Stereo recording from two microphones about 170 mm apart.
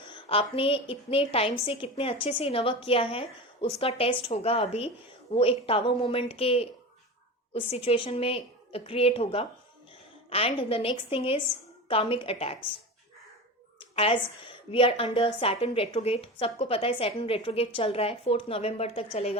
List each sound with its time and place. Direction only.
0.0 s a woman's voice: 30° left (ahead or behind)
13.7 s a woman's voice: 30° left (ahead or behind)